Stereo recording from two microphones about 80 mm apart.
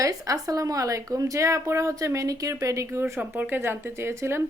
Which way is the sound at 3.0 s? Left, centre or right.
Right.